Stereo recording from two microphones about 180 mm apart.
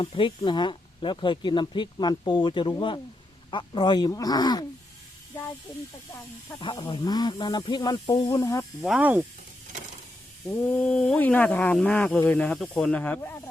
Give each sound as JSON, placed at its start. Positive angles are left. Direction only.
{"t": 0.0, "sound": "speech", "side_deg": 25}
{"t": 6.6, "sound": "speech", "side_deg": 25}
{"t": 8.8, "sound": "speech", "side_deg": -5}
{"t": 10.4, "sound": "speech", "side_deg": 5}